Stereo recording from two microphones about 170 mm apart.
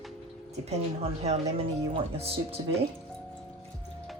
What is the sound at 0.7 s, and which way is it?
Speech, 40° right (ahead or behind).